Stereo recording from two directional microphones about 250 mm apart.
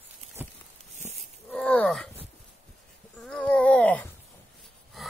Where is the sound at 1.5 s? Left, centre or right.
Centre.